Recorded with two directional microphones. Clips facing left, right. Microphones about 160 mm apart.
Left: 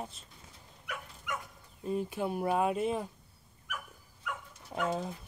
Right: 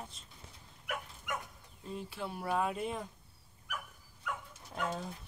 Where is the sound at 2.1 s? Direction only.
15° left (ahead or behind).